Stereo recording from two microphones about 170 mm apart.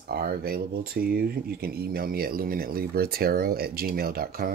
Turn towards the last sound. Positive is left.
turn(degrees=-60)  # may be behind; listen again after turning